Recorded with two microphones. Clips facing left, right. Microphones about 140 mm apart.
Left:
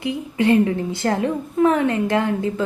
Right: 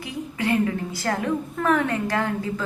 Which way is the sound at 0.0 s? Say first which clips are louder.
Left 7 dB; 25° left (ahead or behind).